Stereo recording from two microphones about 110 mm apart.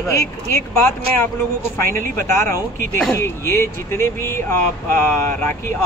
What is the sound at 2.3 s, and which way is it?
Speech, 25° left (ahead or behind).